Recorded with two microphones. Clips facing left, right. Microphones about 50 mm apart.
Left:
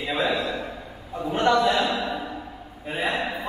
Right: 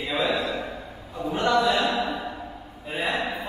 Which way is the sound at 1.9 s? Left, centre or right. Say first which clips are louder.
Even; centre.